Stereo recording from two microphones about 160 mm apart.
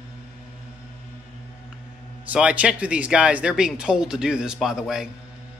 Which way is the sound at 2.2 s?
10° right (ahead or behind).